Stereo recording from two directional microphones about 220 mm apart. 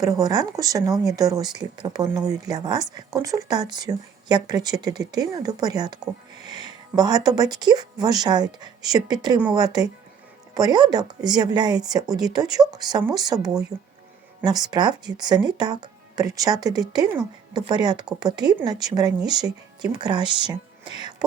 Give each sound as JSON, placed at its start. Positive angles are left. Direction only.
{"t": 0.0, "sound": "speech", "side_deg": -15}